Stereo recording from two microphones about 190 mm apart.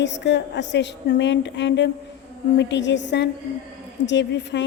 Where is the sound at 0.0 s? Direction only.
70° left (ahead or behind).